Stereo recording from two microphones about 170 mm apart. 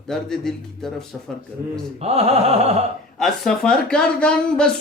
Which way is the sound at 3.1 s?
Centre (ahead or behind).